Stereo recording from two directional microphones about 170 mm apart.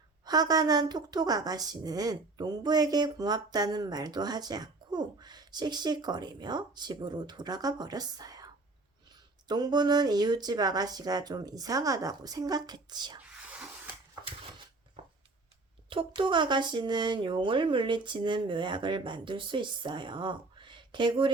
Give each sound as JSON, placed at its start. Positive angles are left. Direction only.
{"t": 0.3, "sound": "a woman's voice", "side_deg": -25}
{"t": 13.2, "sound": "a sound", "side_deg": -10}
{"t": 15.9, "sound": "a woman's voice", "side_deg": -30}